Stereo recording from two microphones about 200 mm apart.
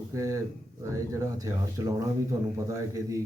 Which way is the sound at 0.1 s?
15° right (ahead or behind).